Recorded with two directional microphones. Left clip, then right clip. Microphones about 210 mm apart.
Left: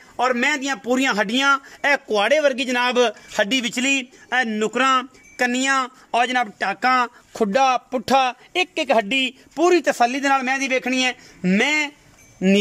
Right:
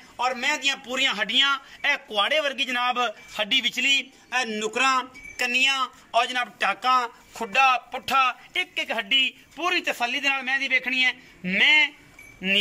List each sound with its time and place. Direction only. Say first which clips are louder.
0.2 s a man's voice: left 4 dB; 55° left (ahead or behind)